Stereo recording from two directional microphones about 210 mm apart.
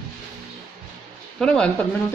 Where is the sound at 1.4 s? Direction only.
5° left (ahead or behind).